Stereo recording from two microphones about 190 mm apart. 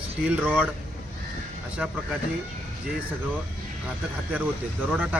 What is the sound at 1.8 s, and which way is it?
Speech, 5° right (ahead or behind).